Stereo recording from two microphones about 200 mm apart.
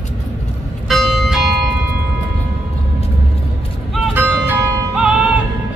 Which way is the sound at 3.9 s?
5° right (ahead or behind).